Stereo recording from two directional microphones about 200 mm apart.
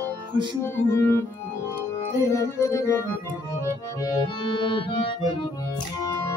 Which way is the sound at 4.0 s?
20° left (ahead or behind).